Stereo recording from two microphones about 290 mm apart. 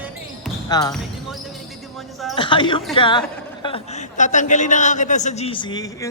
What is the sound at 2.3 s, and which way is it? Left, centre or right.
A man's voice, centre.